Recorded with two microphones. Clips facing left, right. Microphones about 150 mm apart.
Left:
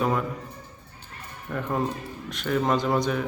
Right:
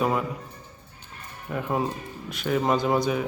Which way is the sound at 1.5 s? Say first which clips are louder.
Even; 5° right (ahead or behind).